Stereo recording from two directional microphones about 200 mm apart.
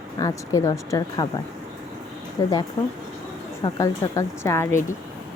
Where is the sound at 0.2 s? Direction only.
15° left (ahead or behind).